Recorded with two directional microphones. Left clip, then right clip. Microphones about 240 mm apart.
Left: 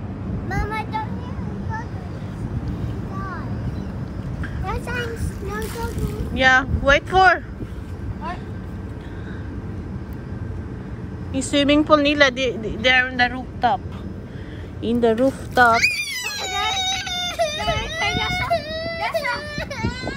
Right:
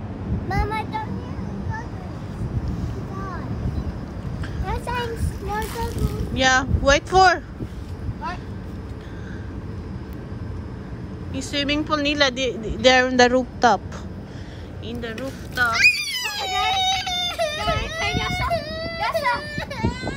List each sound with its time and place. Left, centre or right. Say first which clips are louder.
0.5 s vehicle: right 1 dB; right
4.6 s a sound: even; right
5.0 s vehicle: even; centre
6.3 s a woman's voice: left 3 dB; centre
11.3 s a woman's voice: left 6 dB; centre; by 13.7 s right
14.8 s speech: left 13 dB; centre
16.0 s baby cry: even; centre
19.5 s baby cry: even; right